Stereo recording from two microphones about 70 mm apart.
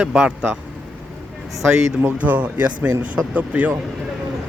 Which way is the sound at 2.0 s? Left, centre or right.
Right.